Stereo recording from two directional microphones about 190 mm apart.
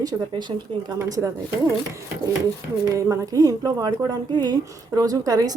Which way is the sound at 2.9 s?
15° right (ahead or behind).